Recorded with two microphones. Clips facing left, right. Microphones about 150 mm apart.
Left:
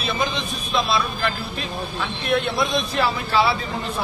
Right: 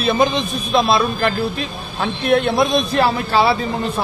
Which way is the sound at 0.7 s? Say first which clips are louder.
Right 6 dB; 55° right (ahead or behind).